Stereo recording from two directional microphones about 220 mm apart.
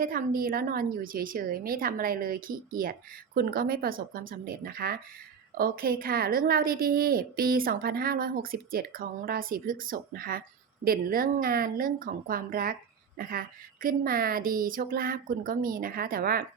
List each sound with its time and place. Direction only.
0.0 s a woman's voice: 40° right (ahead or behind)